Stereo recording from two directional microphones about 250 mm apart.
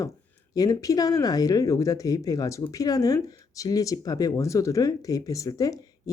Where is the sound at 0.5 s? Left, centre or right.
Centre.